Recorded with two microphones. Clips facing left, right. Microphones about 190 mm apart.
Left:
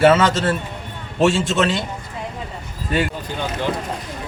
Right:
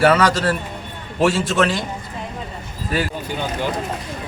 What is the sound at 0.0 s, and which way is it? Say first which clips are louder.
A man's voice: left 1 dB; 25° left (ahead or behind).